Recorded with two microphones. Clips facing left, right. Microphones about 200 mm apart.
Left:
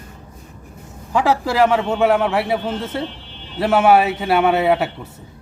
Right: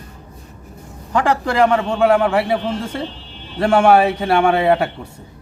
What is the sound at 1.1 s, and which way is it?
A man's voice, 5° left (ahead or behind).